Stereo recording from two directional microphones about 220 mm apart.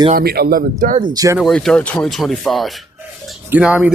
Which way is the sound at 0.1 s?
45° right (ahead or behind).